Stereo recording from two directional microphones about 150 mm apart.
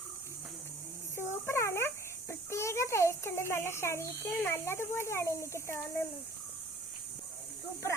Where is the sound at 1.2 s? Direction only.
15° left (ahead or behind).